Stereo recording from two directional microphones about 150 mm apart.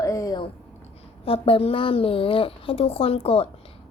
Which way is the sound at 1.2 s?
40° left (ahead or behind).